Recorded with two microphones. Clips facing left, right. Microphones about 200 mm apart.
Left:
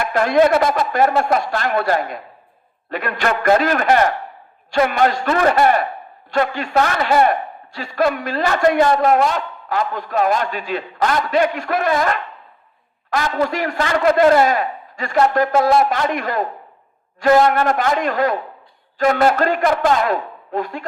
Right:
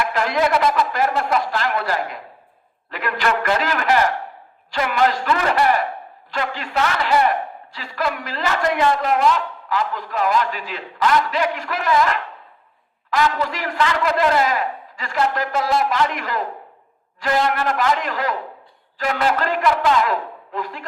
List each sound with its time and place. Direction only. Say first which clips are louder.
0.1 s a man's voice: left 5 dB; 50° left (ahead or behind)
13.1 s a man's voice: left 1 dB; 45° left (ahead or behind)